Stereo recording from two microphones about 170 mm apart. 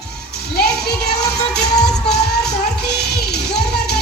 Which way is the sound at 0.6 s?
70° left (ahead or behind).